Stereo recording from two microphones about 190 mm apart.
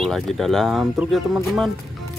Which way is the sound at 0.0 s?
Centre (ahead or behind).